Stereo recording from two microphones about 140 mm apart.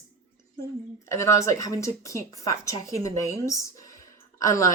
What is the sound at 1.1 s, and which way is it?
A woman's voice, 20° left (ahead or behind).